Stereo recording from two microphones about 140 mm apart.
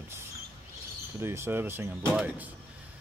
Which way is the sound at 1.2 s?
15° right (ahead or behind).